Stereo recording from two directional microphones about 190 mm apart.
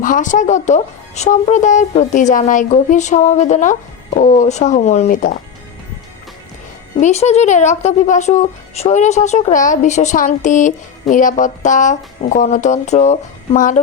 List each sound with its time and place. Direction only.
0.0 s speech: 45° left (ahead or behind)
7.0 s speech: 35° left (ahead or behind)